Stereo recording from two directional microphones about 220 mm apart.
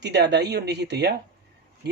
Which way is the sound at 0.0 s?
50° right (ahead or behind).